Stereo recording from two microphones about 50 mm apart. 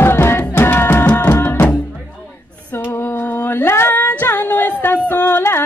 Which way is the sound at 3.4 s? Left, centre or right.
Left.